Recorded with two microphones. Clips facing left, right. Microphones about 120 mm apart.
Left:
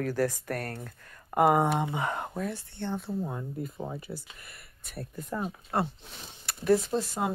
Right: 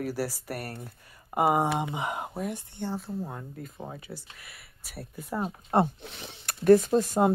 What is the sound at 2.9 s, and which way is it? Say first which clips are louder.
Speech: left 2 dB; centre (ahead or behind).